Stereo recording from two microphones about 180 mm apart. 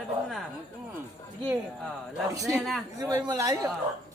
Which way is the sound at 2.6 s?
Centre (ahead or behind).